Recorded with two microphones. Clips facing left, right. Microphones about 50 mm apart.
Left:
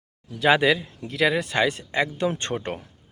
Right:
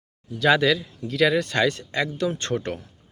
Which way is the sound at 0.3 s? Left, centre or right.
Centre.